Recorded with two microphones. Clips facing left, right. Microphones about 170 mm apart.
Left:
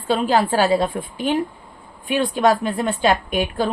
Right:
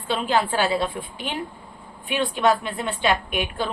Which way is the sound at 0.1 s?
40° left (ahead or behind).